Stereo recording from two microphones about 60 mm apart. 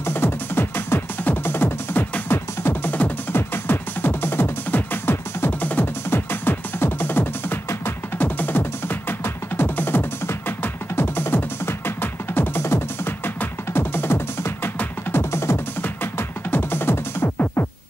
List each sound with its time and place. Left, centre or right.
0.0 s music: left
15.8 s music: left